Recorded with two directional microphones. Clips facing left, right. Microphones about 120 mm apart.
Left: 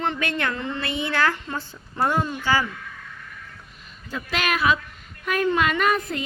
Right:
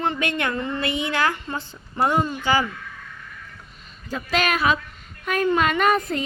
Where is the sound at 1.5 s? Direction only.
15° right (ahead or behind).